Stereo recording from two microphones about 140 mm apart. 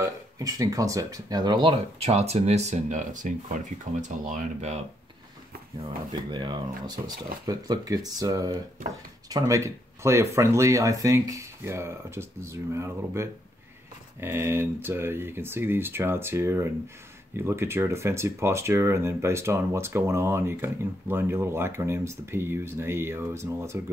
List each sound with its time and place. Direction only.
0.0 s speech: 25° right (ahead or behind); by 4.7 s 55° right (ahead or behind)
5.8 s speech: 35° right (ahead or behind)